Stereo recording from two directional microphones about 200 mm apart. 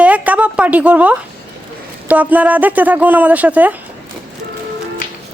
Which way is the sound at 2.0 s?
5° right (ahead or behind).